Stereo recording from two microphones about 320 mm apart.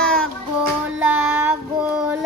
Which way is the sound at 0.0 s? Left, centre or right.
Centre.